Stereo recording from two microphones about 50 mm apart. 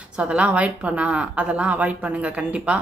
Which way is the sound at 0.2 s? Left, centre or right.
Right.